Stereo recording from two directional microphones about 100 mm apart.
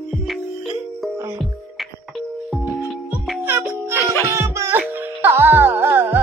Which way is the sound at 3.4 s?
20° right (ahead or behind).